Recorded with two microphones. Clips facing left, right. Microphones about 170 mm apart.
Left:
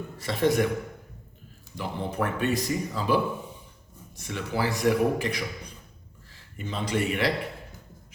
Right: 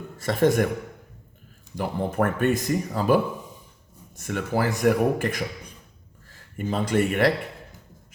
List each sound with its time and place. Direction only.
0.2 s speech: 45° right (ahead or behind)
1.7 s speech: 50° right (ahead or behind)
4.2 s speech: 50° right (ahead or behind)